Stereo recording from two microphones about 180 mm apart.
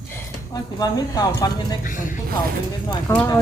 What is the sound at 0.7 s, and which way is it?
Speech, 20° left (ahead or behind).